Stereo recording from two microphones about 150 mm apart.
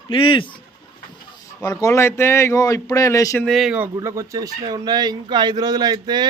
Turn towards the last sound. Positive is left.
turn(degrees=-30)  # may be behind; listen again after turning